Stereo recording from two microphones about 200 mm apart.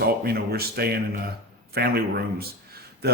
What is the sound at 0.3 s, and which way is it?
A man's voice, 50° right (ahead or behind).